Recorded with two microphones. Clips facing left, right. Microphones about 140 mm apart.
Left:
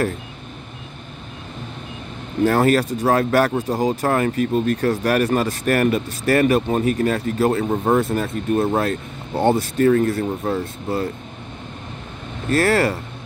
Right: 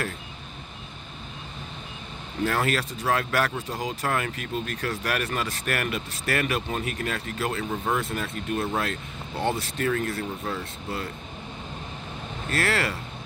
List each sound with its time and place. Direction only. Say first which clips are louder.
2.4 s speech: left 9 dB; 40° left (ahead or behind)
12.4 s speech: left 9 dB; 40° left (ahead or behind)